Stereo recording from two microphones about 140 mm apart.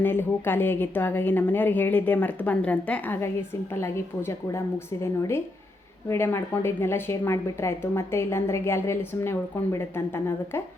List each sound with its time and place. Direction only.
0.0 s a woman's voice: 15° left (ahead or behind)
6.1 s speech: 15° left (ahead or behind)